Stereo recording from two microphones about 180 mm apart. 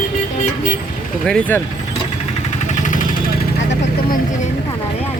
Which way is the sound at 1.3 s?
10° left (ahead or behind).